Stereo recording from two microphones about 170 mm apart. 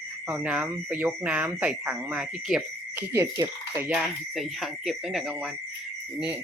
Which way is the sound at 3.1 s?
15° right (ahead or behind).